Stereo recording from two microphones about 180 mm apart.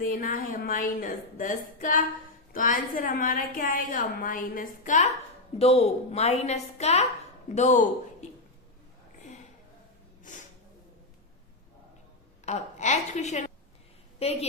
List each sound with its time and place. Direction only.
0.0 s a woman's voice: 50° left (ahead or behind)
12.5 s a woman's voice: 40° left (ahead or behind)